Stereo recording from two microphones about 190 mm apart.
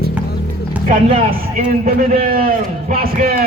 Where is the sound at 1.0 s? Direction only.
30° right (ahead or behind).